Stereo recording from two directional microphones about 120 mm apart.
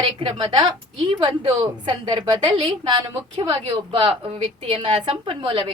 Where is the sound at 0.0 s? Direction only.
45° right (ahead or behind).